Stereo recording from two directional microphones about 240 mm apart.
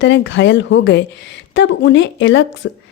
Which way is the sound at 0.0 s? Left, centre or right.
Left.